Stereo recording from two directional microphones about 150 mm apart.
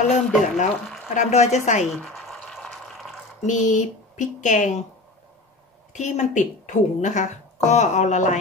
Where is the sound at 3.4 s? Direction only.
55° left (ahead or behind).